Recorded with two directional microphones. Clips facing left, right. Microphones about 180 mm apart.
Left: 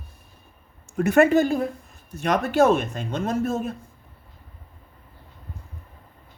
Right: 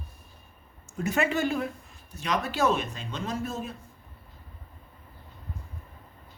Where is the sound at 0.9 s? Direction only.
55° left (ahead or behind).